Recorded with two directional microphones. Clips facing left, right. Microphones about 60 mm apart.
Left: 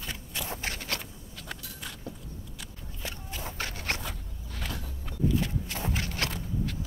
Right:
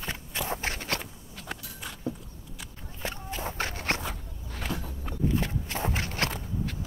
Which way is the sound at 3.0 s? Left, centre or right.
Right.